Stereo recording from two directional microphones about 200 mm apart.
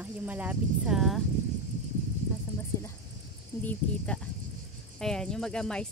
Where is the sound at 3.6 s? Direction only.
5° left (ahead or behind).